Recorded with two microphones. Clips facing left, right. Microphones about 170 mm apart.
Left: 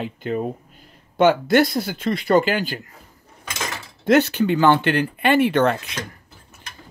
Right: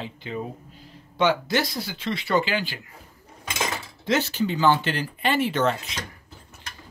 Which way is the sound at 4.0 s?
60° left (ahead or behind).